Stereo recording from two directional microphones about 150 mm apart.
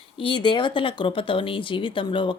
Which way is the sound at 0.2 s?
35° left (ahead or behind).